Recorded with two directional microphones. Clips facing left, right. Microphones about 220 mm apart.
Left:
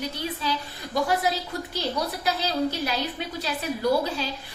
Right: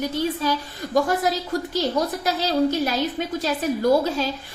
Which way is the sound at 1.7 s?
45° right (ahead or behind).